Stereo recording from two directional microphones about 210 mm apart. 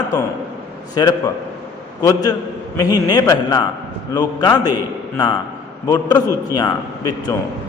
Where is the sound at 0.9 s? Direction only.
20° left (ahead or behind).